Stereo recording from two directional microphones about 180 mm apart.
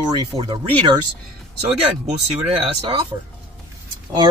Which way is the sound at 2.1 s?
30° right (ahead or behind).